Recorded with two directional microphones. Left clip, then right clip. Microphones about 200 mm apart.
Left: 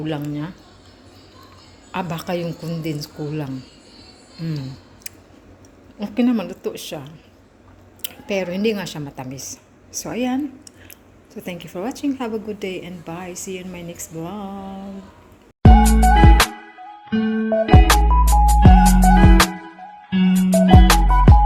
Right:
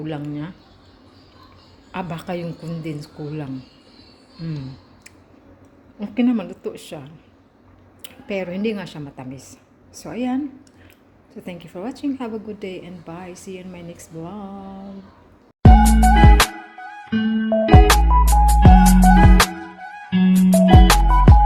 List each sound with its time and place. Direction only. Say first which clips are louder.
0.0 s a woman's voice: left 3 dB; centre (ahead or behind)
1.9 s a woman's voice: left 3 dB; centre (ahead or behind)
6.0 s a woman's voice: left 1 dB; 5° right (ahead or behind)
15.6 s music: even; centre (ahead or behind)